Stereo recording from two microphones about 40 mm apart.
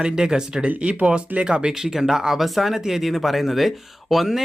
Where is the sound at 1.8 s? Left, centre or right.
Centre.